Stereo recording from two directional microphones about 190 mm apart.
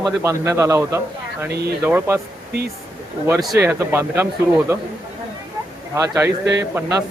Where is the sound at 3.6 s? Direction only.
10° right (ahead or behind).